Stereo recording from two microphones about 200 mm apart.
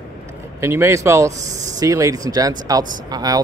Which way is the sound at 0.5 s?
15° right (ahead or behind).